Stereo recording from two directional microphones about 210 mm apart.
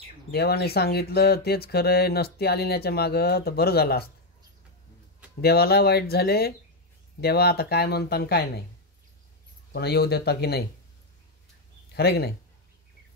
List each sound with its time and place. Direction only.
0.3 s speech: 50° left (ahead or behind)
5.4 s speech: 50° left (ahead or behind)
9.7 s speech: 50° left (ahead or behind)
11.9 s speech: 50° left (ahead or behind)